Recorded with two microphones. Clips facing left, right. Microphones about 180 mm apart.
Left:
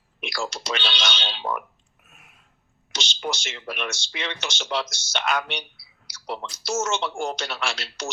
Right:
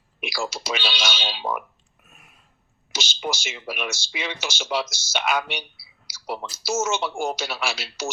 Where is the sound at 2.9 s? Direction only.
5° right (ahead or behind).